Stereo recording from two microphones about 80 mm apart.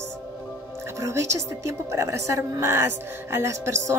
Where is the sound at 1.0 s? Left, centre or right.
Right.